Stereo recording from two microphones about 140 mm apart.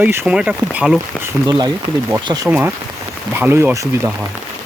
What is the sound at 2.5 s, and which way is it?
Speech, 15° right (ahead or behind).